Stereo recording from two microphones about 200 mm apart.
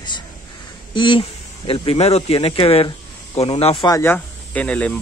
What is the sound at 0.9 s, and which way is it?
Speech, 25° left (ahead or behind).